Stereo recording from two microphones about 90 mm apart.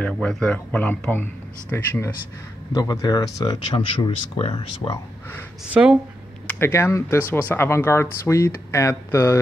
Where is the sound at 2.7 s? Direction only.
40° left (ahead or behind).